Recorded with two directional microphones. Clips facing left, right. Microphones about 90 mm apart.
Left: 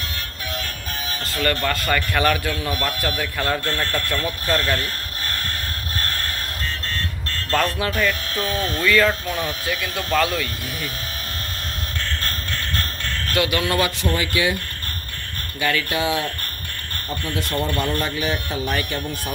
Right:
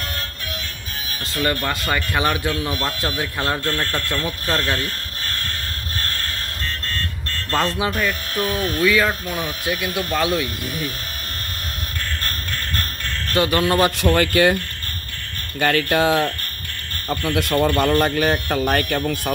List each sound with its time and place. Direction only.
1.3 s speech: 20° right (ahead or behind)
7.5 s speech: 25° right (ahead or behind)
13.3 s speech: 35° right (ahead or behind)
14.0 s speech: 55° right (ahead or behind)
15.6 s speech: 50° right (ahead or behind)
17.1 s speech: 65° right (ahead or behind)